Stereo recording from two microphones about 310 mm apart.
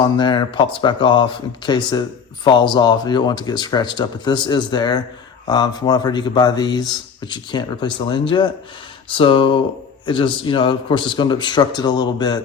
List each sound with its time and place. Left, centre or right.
0.0 s speech: centre